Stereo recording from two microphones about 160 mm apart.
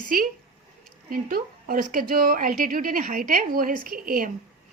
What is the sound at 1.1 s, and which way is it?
A woman's voice, 65° right (ahead or behind).